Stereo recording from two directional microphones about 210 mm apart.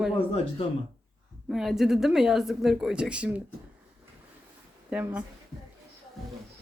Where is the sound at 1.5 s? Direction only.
Centre (ahead or behind).